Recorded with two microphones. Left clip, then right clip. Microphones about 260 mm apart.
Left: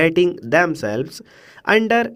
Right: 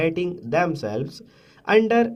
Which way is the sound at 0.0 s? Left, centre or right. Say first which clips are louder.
Left 8 dB; left.